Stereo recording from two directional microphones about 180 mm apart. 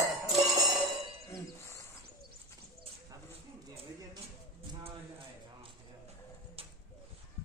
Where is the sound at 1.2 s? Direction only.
15° left (ahead or behind).